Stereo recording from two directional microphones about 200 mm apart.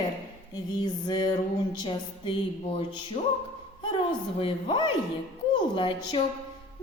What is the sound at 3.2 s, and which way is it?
Music, 35° left (ahead or behind).